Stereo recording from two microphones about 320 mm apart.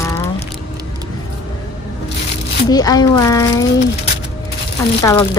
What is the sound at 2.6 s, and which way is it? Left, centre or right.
Speech, centre.